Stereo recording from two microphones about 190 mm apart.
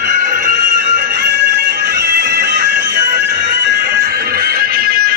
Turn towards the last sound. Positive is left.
turn(degrees=-50)  # may be behind; listen again after turning